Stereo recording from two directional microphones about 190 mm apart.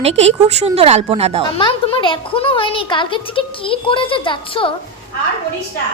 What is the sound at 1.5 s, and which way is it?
Speech, 25° left (ahead or behind).